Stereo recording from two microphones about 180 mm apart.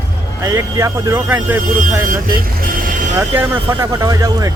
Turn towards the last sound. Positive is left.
turn(degrees=-20)  # may be behind; listen again after turning